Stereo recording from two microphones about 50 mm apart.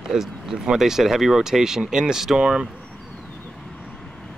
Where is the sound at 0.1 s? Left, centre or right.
Centre.